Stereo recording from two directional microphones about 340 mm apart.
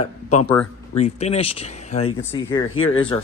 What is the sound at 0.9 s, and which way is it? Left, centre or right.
Speech, centre.